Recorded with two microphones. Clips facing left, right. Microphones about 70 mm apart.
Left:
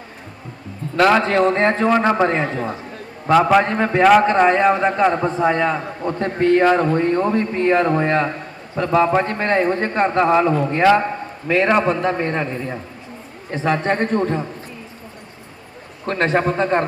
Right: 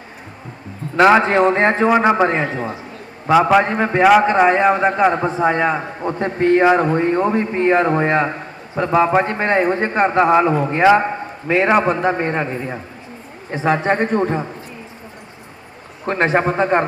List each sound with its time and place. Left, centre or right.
0.9 s a man's voice: right
3.2 s a man's voice: centre
16.0 s a man's voice: right